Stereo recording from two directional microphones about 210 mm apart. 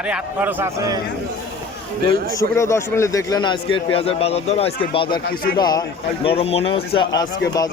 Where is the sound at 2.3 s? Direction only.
15° left (ahead or behind).